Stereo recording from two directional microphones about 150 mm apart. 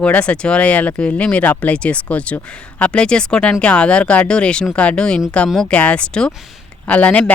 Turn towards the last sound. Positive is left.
turn(degrees=10)  # may be behind; listen again after turning